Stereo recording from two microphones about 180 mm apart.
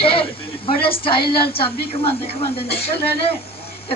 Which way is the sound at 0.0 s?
30° left (ahead or behind).